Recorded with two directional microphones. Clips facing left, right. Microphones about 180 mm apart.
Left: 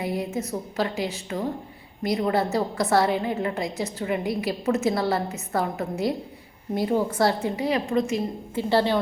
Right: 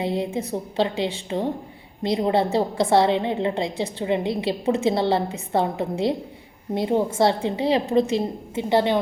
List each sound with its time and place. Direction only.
0.0 s a woman's voice: 25° right (ahead or behind)
8.7 s a woman's voice: 20° right (ahead or behind)